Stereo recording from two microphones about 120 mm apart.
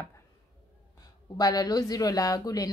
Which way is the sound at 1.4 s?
35° left (ahead or behind).